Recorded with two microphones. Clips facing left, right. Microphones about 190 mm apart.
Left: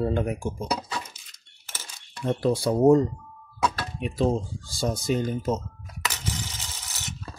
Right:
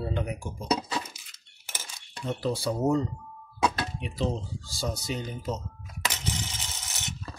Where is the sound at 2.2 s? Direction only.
55° left (ahead or behind).